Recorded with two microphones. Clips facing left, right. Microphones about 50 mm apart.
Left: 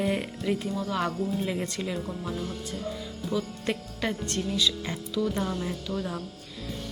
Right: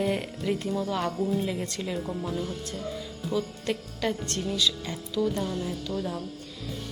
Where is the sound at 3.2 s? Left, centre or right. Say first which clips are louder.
Right 1 dB; centre.